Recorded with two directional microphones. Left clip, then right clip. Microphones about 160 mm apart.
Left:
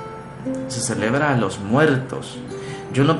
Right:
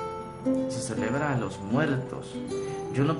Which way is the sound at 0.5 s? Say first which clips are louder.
Left 3 dB; 10° left (ahead or behind).